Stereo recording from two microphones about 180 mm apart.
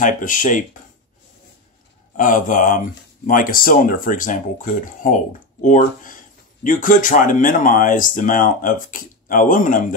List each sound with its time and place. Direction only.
0.0 s speech: 45° left (ahead or behind)
2.1 s speech: 45° left (ahead or behind)